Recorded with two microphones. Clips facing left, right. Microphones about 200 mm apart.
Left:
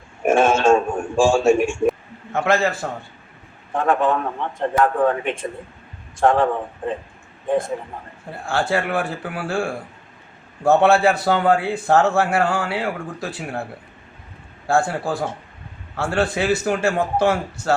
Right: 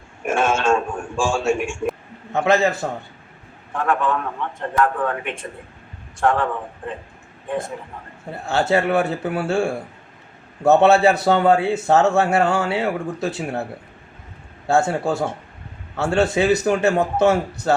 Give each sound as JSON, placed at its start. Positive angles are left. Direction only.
{"t": 0.2, "sound": "radio", "side_deg": 40}
{"t": 2.3, "sound": "a man's voice", "side_deg": -20}
{"t": 3.8, "sound": "a man's voice", "side_deg": 30}
{"t": 8.3, "sound": "a man's voice", "side_deg": -20}
{"t": 14.7, "sound": "a man's voice", "side_deg": -25}